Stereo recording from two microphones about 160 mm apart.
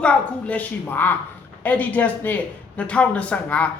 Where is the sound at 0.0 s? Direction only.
5° left (ahead or behind).